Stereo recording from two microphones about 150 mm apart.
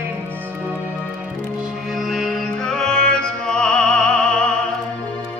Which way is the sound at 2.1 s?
Centre (ahead or behind).